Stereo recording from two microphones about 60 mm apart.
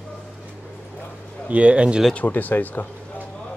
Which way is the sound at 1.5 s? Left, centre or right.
Right.